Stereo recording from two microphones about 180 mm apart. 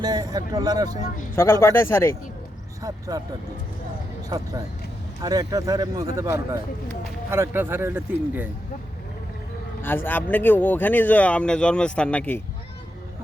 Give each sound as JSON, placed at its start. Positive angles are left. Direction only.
{"t": 0.0, "sound": "speech", "side_deg": -20}
{"t": 1.0, "sound": "speech", "side_deg": 50}
{"t": 1.4, "sound": "speech", "side_deg": 15}
{"t": 4.3, "sound": "speech", "side_deg": -20}
{"t": 9.8, "sound": "speech", "side_deg": 10}